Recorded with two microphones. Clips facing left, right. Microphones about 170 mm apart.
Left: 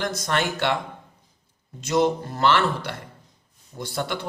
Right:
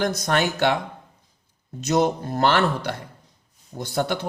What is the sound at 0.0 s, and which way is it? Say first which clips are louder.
Speech: right 3 dB; 45° right (ahead or behind).